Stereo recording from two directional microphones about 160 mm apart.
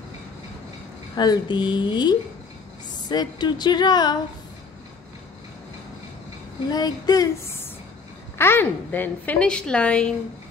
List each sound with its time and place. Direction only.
1.1 s speech: 25° left (ahead or behind)
6.7 s a sound: 25° left (ahead or behind)
8.4 s a woman's voice: 15° left (ahead or behind)